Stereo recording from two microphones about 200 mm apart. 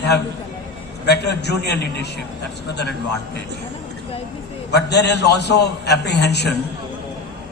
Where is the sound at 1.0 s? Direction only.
55° left (ahead or behind).